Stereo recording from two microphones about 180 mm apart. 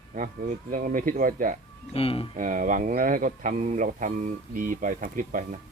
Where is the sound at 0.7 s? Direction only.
50° right (ahead or behind).